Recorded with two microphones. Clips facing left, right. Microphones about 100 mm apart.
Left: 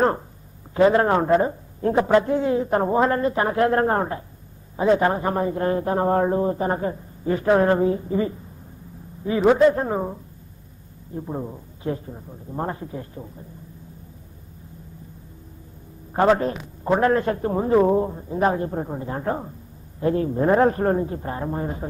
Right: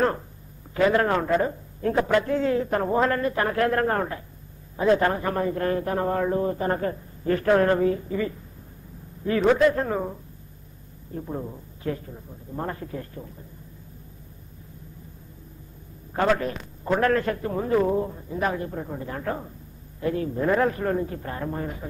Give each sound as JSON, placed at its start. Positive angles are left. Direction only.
{"t": 0.7, "sound": "a man's voice", "side_deg": 30}
{"t": 9.5, "sound": "a man's voice", "side_deg": 25}
{"t": 11.1, "sound": "a man's voice", "side_deg": 20}
{"t": 16.1, "sound": "a man's voice", "side_deg": 30}